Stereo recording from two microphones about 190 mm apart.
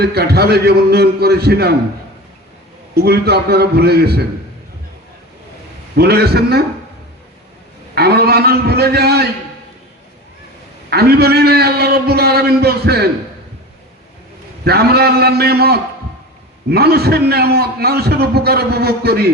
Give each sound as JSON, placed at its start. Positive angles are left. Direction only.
{"t": 0.0, "sound": "a man's voice", "side_deg": -55}
{"t": 2.9, "sound": "a man's voice", "side_deg": -55}
{"t": 6.0, "sound": "a man's voice", "side_deg": -55}
{"t": 7.9, "sound": "a man's voice", "side_deg": -55}
{"t": 10.8, "sound": "a man's voice", "side_deg": -55}
{"t": 14.6, "sound": "a man's voice", "side_deg": -55}